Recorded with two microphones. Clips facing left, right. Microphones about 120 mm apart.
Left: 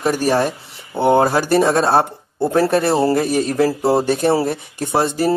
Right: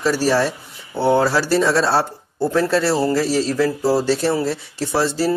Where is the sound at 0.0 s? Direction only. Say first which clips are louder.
Left 1 dB; 50° left (ahead or behind).